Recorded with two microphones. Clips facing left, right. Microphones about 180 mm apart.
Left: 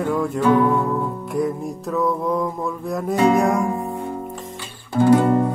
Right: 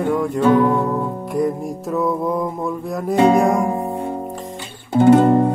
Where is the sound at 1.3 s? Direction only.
5° right (ahead or behind).